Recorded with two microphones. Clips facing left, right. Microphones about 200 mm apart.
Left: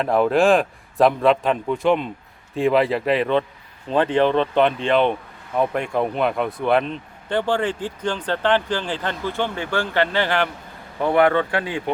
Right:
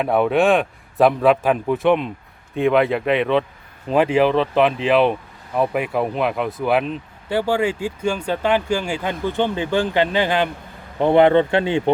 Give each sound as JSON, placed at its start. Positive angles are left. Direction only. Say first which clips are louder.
{"t": 0.0, "sound": "a man's voice", "louder": "even", "side_deg": -5}